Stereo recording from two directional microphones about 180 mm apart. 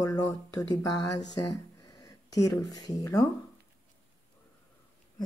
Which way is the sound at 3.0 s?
20° left (ahead or behind).